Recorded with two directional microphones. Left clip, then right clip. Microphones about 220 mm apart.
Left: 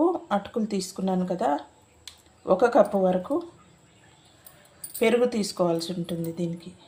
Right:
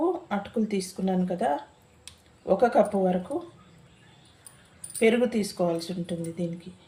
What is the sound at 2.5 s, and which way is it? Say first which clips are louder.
Speech: left 2 dB; 20° left (ahead or behind).